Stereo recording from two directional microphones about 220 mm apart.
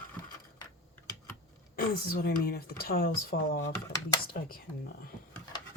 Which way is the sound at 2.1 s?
40° left (ahead or behind).